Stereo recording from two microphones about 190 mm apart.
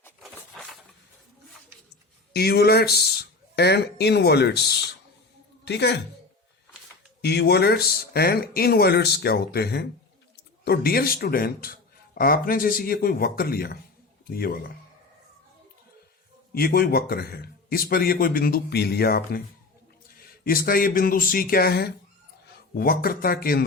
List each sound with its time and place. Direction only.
2.3 s speech: 55° left (ahead or behind)
5.6 s speech: 65° left (ahead or behind)
7.2 s a man's voice: 60° left (ahead or behind)
16.6 s a man's voice: 55° left (ahead or behind)
20.4 s a man's voice: 50° left (ahead or behind)